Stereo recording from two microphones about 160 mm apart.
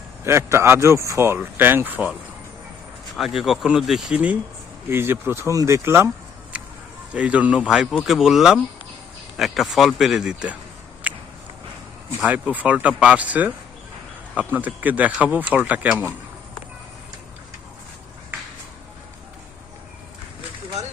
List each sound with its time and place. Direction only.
0.3 s speech: 15° right (ahead or behind)
3.2 s speech: centre (ahead or behind)
7.1 s speech: 10° right (ahead or behind)
11.1 s a sound: 10° right (ahead or behind)
12.2 s speech: 10° right (ahead or behind)